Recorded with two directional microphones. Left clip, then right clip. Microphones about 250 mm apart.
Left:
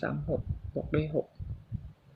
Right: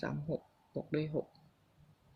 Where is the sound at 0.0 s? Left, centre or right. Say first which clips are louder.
Left 6 dB; centre.